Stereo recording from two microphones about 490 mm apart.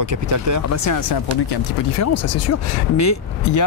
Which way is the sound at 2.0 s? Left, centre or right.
Left.